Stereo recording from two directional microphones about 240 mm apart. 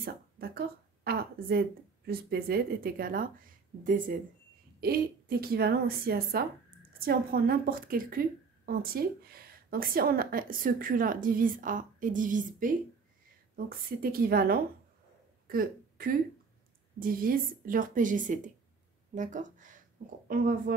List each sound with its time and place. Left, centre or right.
0.0 s a woman's voice: right
15.4 s a sound: right
17.0 s a woman's voice: right